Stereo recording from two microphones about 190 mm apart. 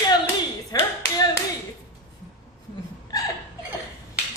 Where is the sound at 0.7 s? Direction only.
20° left (ahead or behind).